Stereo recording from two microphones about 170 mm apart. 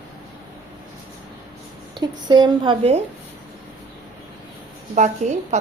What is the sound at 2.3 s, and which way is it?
Speech, 25° right (ahead or behind).